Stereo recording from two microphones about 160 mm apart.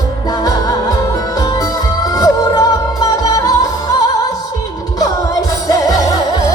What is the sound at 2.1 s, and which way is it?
Music, 25° left (ahead or behind).